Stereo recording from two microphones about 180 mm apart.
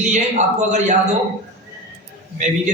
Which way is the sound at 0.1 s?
40° right (ahead or behind).